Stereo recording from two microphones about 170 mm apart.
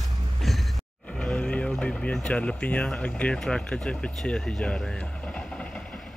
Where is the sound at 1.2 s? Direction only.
5° left (ahead or behind).